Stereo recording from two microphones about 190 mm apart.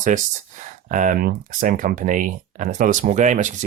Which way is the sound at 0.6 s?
40° right (ahead or behind).